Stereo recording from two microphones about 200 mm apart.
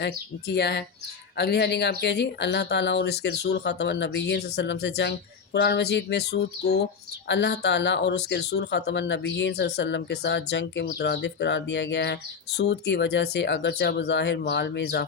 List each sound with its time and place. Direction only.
0.0 s speech: 55° left (ahead or behind)